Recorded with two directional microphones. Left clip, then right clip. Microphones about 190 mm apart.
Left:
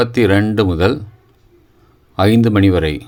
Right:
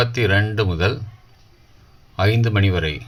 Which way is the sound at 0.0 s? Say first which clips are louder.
Left 5 dB; 45° left (ahead or behind).